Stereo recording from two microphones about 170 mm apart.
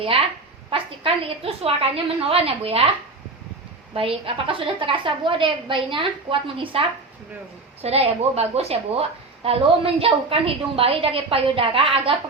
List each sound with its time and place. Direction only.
0.7 s a woman's voice: 35° right (ahead or behind)
3.9 s a woman's voice: 35° right (ahead or behind)